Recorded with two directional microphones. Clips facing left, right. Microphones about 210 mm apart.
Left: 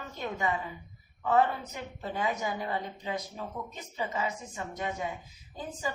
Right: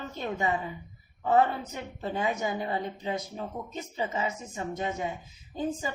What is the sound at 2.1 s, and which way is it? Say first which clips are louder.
Speech: right 2 dB; 25° right (ahead or behind).